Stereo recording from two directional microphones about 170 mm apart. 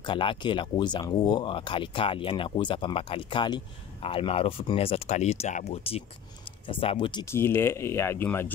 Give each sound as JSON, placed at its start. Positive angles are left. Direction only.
{"t": 0.0, "sound": "speech", "side_deg": 30}
{"t": 7.2, "sound": "speech", "side_deg": 15}